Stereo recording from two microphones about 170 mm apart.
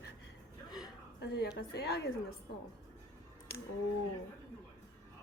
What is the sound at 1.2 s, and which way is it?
Speech, 80° left.